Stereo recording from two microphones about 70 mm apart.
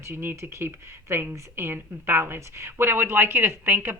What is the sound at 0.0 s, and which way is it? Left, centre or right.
Speech, right.